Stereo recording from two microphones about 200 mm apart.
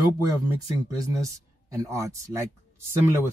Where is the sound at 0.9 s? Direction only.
15° right (ahead or behind).